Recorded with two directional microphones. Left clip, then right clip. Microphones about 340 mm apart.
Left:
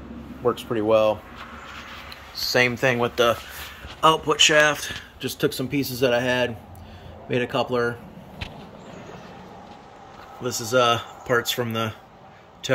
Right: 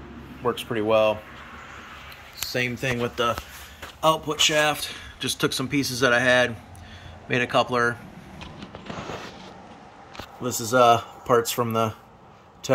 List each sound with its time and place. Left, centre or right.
0.7 s speech: centre
2.5 s speech: centre
10.4 s speech: right
10.8 s speech: centre